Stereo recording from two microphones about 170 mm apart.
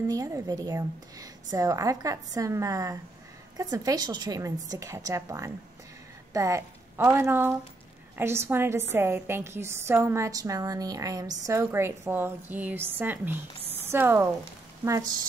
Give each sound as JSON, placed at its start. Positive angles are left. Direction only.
{"t": 0.1, "sound": "a woman's voice", "side_deg": -20}